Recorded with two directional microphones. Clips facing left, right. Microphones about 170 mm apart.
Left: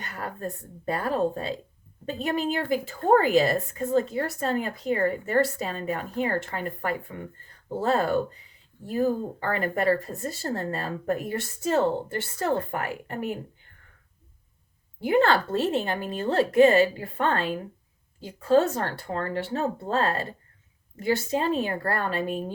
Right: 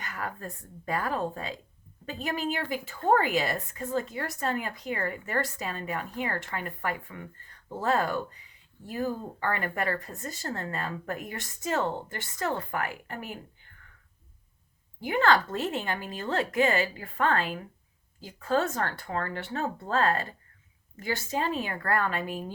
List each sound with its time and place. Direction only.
0.0 s a woman's voice: 35° left (ahead or behind)
15.0 s a woman's voice: 35° left (ahead or behind)